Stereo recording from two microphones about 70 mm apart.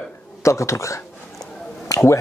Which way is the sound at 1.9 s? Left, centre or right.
Left.